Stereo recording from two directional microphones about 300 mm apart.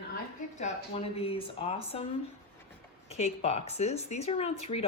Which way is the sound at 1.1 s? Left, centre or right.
Centre.